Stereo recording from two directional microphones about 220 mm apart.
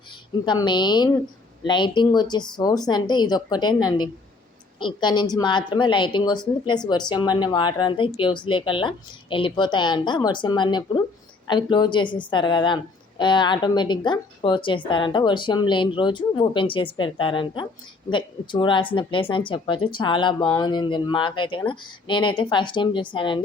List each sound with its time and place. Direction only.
0.4 s a woman's voice: 20° left (ahead or behind)